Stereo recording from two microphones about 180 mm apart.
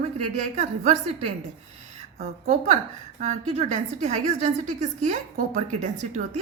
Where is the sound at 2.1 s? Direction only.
45° right (ahead or behind).